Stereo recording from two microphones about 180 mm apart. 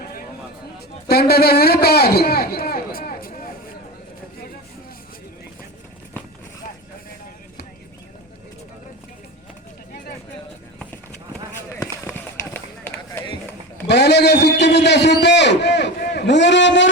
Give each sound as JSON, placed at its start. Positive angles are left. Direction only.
{"t": 1.0, "sound": "a man's voice", "side_deg": 60}
{"t": 11.5, "sound": "run", "side_deg": 15}
{"t": 13.8, "sound": "a sound", "side_deg": 70}